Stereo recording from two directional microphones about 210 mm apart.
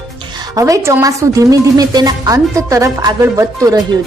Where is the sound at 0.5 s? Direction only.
15° right (ahead or behind).